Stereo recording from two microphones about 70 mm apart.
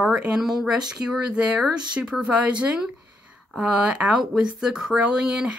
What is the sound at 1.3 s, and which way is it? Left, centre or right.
Speech, centre.